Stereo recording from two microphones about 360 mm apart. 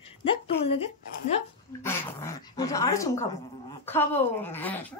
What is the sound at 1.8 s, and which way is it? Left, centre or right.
Dog, centre.